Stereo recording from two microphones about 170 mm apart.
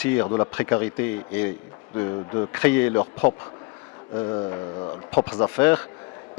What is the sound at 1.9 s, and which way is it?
Mantra, 25° left (ahead or behind).